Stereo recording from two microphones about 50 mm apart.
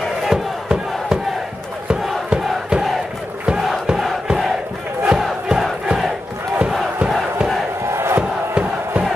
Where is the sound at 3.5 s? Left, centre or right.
Centre.